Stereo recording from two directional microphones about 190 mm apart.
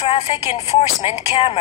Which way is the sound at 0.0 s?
30° left (ahead or behind).